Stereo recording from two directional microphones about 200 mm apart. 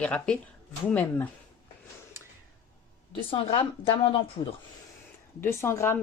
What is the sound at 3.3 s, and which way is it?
A woman's voice, 25° left (ahead or behind).